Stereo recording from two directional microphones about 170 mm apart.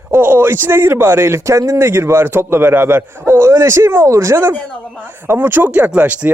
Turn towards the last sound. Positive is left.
turn(degrees=-10)  # may be behind; listen again after turning